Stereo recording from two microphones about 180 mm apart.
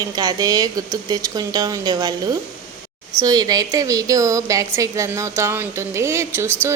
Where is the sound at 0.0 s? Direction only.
20° right (ahead or behind).